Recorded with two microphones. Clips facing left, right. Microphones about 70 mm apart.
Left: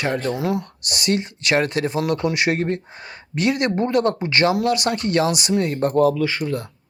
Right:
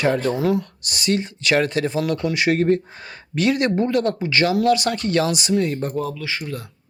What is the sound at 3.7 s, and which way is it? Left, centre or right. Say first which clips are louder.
Speech: left 1 dB; left.